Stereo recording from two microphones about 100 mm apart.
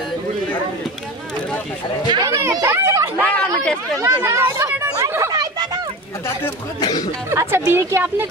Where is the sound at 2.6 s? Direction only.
30° right (ahead or behind).